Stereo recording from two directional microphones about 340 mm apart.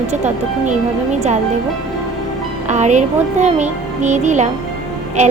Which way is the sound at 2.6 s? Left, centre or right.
Right.